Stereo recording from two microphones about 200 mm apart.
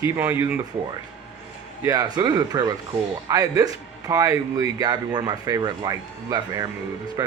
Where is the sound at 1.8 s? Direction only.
15° right (ahead or behind).